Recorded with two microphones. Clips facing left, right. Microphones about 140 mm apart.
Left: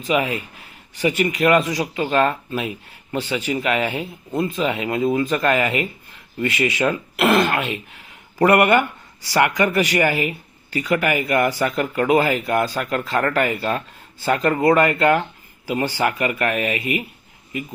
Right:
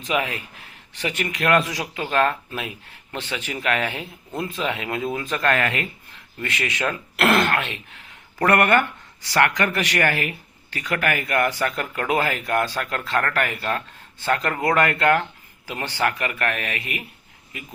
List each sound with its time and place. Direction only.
0.0 s a man's voice: 5° left (ahead or behind)